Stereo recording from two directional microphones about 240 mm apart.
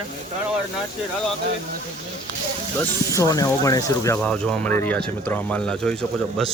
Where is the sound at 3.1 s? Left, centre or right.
Centre.